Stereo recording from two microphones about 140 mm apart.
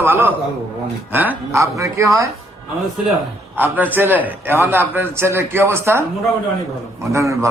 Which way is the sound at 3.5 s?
10° right (ahead or behind).